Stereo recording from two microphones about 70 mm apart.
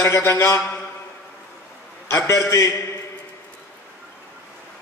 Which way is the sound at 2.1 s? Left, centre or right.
Left.